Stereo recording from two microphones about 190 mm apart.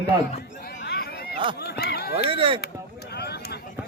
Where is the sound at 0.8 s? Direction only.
55° left (ahead or behind).